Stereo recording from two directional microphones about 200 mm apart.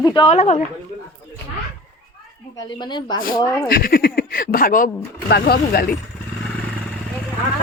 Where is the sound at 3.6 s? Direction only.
45° left (ahead or behind).